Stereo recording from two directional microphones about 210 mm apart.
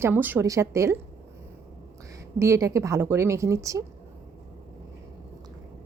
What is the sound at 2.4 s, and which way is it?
A woman's voice, 15° right (ahead or behind).